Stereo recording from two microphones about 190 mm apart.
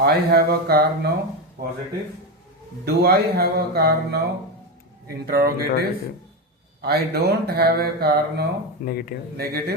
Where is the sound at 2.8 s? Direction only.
55° right (ahead or behind).